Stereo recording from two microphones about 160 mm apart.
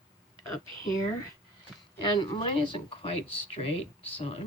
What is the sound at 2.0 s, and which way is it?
Speech, 25° left (ahead or behind).